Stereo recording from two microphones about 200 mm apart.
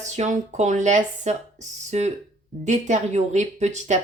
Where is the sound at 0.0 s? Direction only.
35° right (ahead or behind).